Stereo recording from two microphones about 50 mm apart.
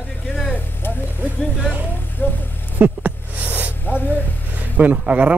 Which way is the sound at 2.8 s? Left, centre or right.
Right.